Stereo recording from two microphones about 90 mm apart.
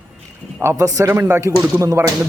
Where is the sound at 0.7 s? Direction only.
40° right (ahead or behind).